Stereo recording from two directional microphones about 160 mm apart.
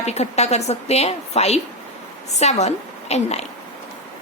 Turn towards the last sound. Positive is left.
turn(degrees=45)  # may be behind; listen again after turning